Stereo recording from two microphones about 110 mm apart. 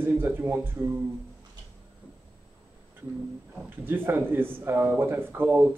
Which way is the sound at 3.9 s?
20° right (ahead or behind).